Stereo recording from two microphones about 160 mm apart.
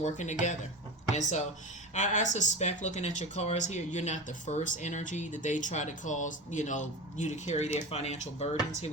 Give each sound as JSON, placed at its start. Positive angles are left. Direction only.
{"t": 0.0, "sound": "speech", "side_deg": 50}